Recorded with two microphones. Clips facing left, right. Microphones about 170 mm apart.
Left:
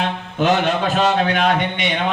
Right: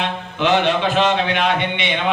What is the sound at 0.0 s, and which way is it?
Speech, 45° left (ahead or behind).